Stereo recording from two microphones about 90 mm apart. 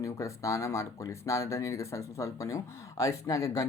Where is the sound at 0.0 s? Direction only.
35° left (ahead or behind).